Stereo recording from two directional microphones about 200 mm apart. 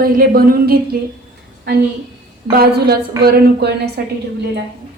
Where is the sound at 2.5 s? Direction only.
50° right (ahead or behind).